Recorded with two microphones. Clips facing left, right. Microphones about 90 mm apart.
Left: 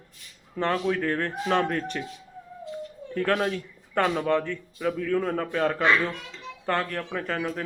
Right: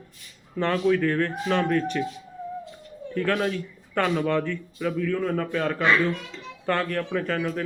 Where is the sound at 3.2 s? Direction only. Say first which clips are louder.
Even; 30° left (ahead or behind).